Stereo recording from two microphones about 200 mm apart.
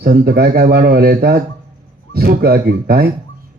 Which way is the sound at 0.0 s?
50° right (ahead or behind).